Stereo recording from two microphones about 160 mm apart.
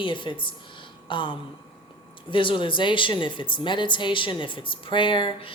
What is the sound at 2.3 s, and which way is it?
Speech, 30° left (ahead or behind).